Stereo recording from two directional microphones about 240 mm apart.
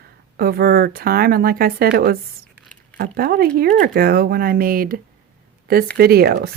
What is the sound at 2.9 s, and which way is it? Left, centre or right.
Speech, right.